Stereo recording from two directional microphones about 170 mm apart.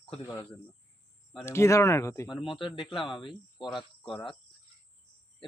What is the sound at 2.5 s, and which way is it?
Speech, 30° left (ahead or behind).